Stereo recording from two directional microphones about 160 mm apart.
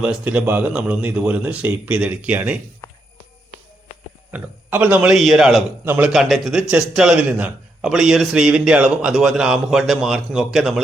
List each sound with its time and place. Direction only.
0.0 s speech: 5° right (ahead or behind)
2.8 s a sound: 15° left (ahead or behind)
4.3 s a man's voice: 10° right (ahead or behind)
5.8 s speech: 15° right (ahead or behind)
6.1 s a man's voice: centre (ahead or behind)